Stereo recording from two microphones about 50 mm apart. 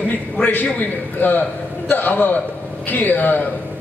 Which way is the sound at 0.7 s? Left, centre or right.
Left.